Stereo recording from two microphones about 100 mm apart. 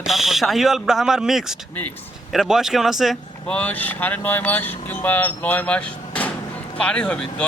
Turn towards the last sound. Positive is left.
turn(degrees=10)  # may be behind; listen again after turning